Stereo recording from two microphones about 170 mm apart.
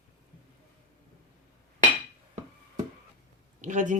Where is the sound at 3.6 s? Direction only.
45° right (ahead or behind).